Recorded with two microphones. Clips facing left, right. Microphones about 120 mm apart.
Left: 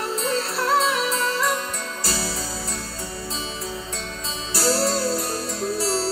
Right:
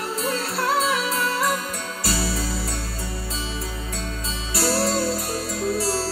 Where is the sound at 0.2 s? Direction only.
25° left (ahead or behind).